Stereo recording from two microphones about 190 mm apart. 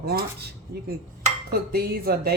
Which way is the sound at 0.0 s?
55° right (ahead or behind).